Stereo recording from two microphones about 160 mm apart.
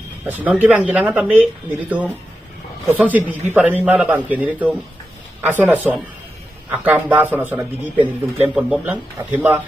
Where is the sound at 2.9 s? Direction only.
10° right (ahead or behind).